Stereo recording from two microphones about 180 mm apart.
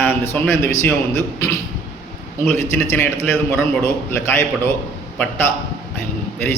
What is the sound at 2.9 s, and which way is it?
Speech, 10° left (ahead or behind).